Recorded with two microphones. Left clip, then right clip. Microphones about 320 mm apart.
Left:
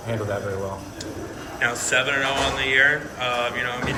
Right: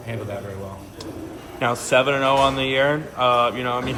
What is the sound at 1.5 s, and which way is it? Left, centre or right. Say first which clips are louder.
Speech: right 3 dB; centre.